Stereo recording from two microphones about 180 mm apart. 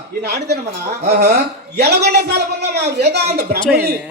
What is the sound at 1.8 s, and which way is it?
A man's voice, 65° right (ahead or behind).